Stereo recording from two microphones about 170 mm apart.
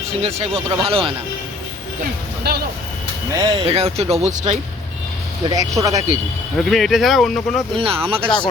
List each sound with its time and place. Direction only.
0.1 s speech: 35° right (ahead or behind)
2.5 s speech: 65° right (ahead or behind)
3.3 s speech: 25° right (ahead or behind)
3.7 s speech: 35° right (ahead or behind)
5.5 s speech: 20° right (ahead or behind)
6.6 s speech: centre (ahead or behind)
7.8 s speech: 35° right (ahead or behind)